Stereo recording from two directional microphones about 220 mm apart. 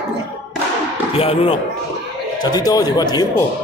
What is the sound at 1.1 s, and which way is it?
A man's voice, 25° left (ahead or behind).